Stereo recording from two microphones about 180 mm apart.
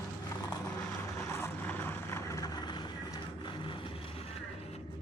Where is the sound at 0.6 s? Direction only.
10° left (ahead or behind); by 4.4 s 35° left (ahead or behind).